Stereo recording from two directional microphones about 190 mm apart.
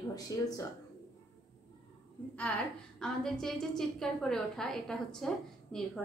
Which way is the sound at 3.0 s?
Centre (ahead or behind).